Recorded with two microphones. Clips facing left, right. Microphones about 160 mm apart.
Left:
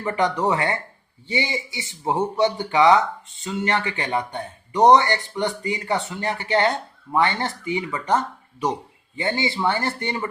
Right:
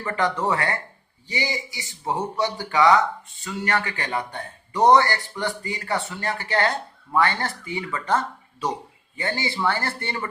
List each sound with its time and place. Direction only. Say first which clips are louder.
0.0 s speech: left 3 dB; 20° left (ahead or behind)